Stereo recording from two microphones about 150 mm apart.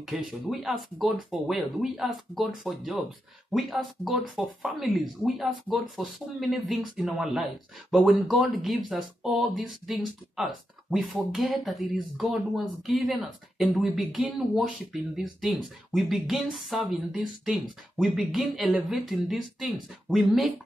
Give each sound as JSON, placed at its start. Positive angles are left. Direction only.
{"t": 0.1, "sound": "speech", "side_deg": -5}